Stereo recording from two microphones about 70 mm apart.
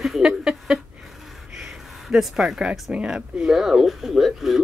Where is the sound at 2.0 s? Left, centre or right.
Centre.